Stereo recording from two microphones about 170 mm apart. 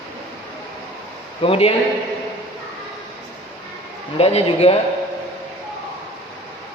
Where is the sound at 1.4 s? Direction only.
35° left (ahead or behind).